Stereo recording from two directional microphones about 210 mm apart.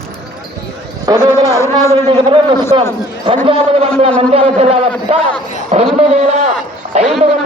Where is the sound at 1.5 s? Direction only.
15° left (ahead or behind).